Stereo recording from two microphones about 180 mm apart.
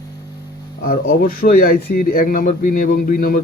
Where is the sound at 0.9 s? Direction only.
50° left (ahead or behind).